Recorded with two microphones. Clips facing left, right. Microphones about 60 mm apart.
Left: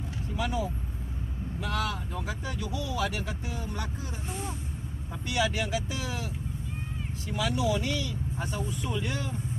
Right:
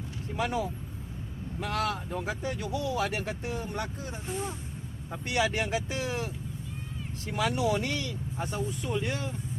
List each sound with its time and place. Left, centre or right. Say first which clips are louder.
0.3 s speech: right 2 dB; right
1.6 s speech: right 2 dB; right
5.2 s speech: right 1 dB; right
8.9 s speech: right 2 dB; right